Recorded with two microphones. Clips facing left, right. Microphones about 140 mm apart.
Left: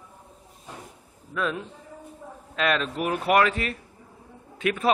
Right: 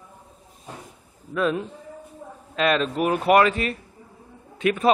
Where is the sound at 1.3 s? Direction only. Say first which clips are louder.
Right 5 dB; 25° right (ahead or behind).